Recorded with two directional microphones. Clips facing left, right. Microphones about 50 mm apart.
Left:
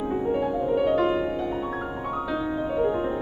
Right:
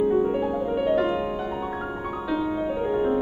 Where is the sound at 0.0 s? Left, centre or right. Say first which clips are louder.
Right 3 dB; centre.